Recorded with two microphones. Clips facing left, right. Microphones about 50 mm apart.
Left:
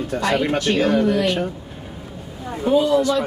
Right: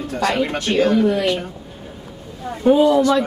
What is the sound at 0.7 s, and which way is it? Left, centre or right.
Speech, centre.